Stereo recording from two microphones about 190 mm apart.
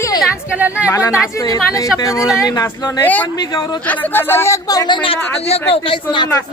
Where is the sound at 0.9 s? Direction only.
15° left (ahead or behind).